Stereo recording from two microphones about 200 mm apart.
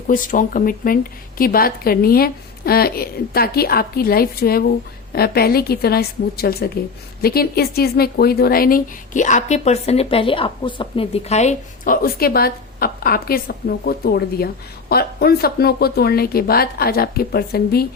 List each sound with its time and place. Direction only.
0.1 s a woman's voice: 40° left (ahead or behind)
12.0 s a woman's voice: 50° left (ahead or behind)